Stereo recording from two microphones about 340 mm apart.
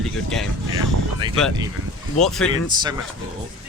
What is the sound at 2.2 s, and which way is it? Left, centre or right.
Speech, centre.